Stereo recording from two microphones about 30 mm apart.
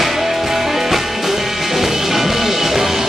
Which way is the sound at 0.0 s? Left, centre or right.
Centre.